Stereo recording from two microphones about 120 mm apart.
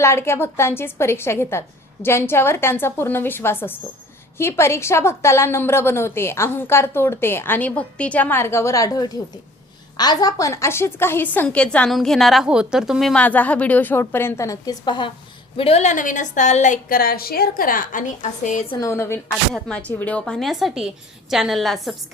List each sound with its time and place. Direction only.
0.0 s a woman's voice: 20° left (ahead or behind); by 13.2 s centre (ahead or behind)
13.2 s a woman's voice: 15° left (ahead or behind); by 15.1 s 40° left (ahead or behind)
15.5 s a woman's voice: 55° left (ahead or behind); by 16.8 s 85° left
17.9 s a woman's voice: 90° left
18.8 s a woman's voice: 25° left (ahead or behind)
19.5 s a woman's voice: 5° left (ahead or behind)